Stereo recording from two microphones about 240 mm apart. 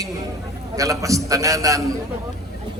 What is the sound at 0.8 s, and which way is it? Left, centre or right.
A man's voice, centre.